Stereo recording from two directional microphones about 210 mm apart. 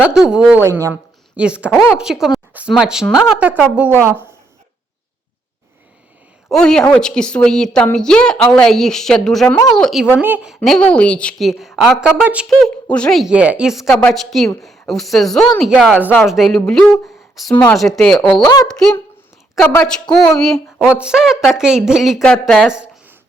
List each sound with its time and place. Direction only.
0.0 s a woman's voice: 5° right (ahead or behind)
6.5 s a woman's voice: 5° left (ahead or behind)
18.4 s a woman's voice: 20° left (ahead or behind)
19.7 s a woman's voice: 5° left (ahead or behind)